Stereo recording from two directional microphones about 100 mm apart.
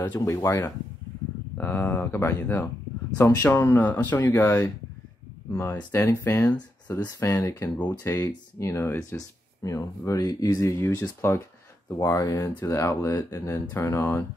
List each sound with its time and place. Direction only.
0.0 s speech: 30° left (ahead or behind)
8.2 s speech: 30° left (ahead or behind)